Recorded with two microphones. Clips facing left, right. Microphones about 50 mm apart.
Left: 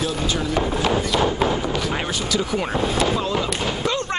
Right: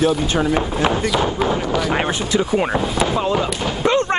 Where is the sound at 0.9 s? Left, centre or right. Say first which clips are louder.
Right 1 dB; centre.